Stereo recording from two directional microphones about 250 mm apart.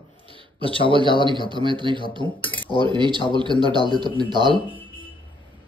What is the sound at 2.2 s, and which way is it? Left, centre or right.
Speech, centre.